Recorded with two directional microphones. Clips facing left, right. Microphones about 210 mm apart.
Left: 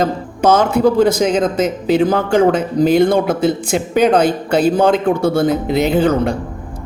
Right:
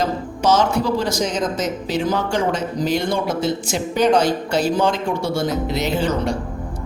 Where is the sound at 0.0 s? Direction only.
55° left (ahead or behind).